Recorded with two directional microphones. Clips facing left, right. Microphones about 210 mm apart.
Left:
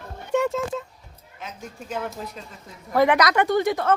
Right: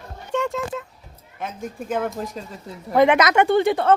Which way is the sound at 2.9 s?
20° right (ahead or behind).